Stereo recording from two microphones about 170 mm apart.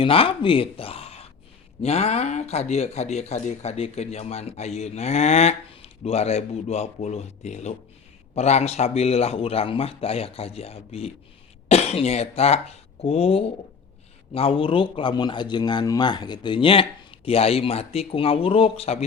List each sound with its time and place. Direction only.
0.0 s speech: 30° left (ahead or behind)